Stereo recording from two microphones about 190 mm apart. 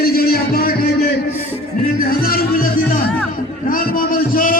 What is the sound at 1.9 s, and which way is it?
Music, 50° left (ahead or behind).